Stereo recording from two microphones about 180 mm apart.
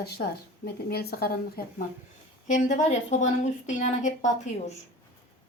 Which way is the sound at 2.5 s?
45° left (ahead or behind).